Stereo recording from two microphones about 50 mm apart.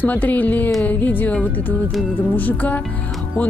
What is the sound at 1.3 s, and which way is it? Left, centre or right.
Speech, left.